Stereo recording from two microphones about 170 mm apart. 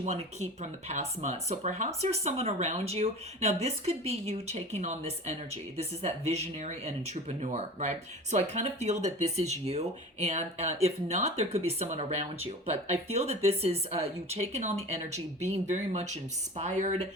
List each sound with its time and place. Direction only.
0.0 s speech: 40° right (ahead or behind)